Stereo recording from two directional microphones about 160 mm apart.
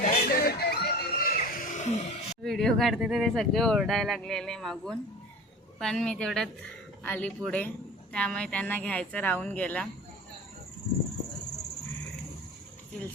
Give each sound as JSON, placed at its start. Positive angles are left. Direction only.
{"t": 0.0, "sound": "music", "side_deg": 65}
{"t": 2.4, "sound": "speech", "side_deg": 5}